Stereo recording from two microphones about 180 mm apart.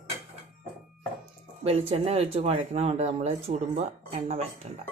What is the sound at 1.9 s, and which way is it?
Speech, 35° right (ahead or behind).